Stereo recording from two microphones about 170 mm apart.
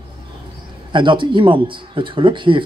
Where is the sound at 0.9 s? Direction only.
30° right (ahead or behind).